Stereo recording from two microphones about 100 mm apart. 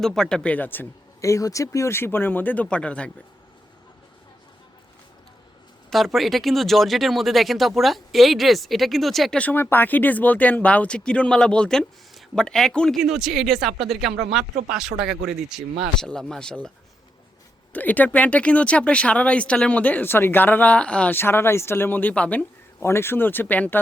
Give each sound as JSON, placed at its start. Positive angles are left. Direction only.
{"t": 0.0, "sound": "speech", "side_deg": 5}
{"t": 1.2, "sound": "speech", "side_deg": 35}
{"t": 5.9, "sound": "speech", "side_deg": 0}
{"t": 9.4, "sound": "speech", "side_deg": 20}
{"t": 13.0, "sound": "speech", "side_deg": -5}
{"t": 16.0, "sound": "speech", "side_deg": 5}
{"t": 22.8, "sound": "speech", "side_deg": 25}